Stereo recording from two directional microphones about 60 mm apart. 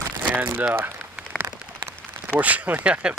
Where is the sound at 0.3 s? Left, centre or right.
Right.